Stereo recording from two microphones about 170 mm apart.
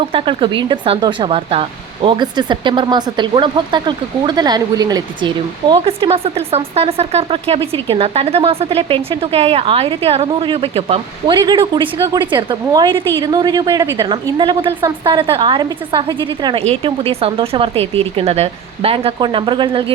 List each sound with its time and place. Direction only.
0.1 s a woman's voice: 30° right (ahead or behind)